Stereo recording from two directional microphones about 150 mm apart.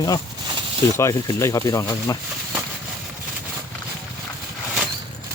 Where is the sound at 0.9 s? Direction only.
20° left (ahead or behind).